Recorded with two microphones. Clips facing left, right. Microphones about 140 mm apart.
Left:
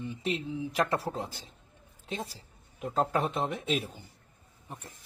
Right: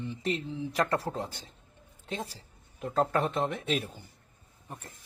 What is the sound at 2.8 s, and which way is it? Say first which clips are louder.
Speech: right 1 dB; 5° left (ahead or behind).